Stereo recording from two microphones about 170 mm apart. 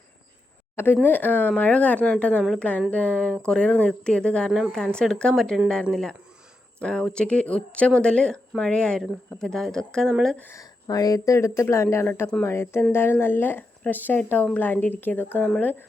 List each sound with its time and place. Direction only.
1.0 s speech: 10° left (ahead or behind)